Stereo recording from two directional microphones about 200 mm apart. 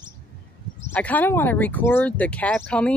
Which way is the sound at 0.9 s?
10° left (ahead or behind).